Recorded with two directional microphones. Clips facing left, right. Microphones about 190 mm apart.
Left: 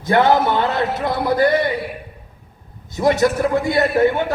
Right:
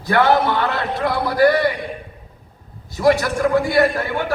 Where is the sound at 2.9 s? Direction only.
20° left (ahead or behind).